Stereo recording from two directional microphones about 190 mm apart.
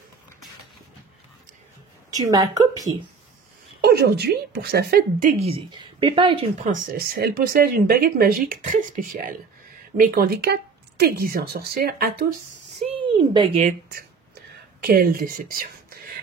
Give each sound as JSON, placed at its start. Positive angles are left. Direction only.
{"t": 2.1, "sound": "speech", "side_deg": -20}
{"t": 3.8, "sound": "speech", "side_deg": -60}
{"t": 5.4, "sound": "speech", "side_deg": -25}
{"t": 6.6, "sound": "speech", "side_deg": -45}
{"t": 12.9, "sound": "a sound", "side_deg": -25}
{"t": 13.6, "sound": "speech", "side_deg": -40}
{"t": 14.8, "sound": "speech", "side_deg": -50}